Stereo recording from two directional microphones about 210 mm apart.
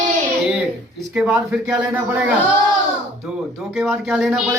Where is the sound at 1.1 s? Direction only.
5° right (ahead or behind).